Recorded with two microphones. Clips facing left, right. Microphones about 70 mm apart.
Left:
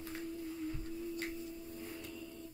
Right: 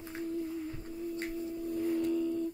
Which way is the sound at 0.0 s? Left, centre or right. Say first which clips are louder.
Right 6 dB; right.